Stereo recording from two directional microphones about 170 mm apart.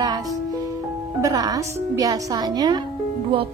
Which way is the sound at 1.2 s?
20° right (ahead or behind).